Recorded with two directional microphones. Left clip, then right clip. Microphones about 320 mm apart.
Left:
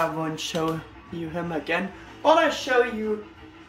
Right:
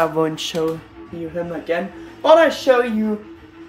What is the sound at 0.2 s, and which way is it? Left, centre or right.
Speech, centre.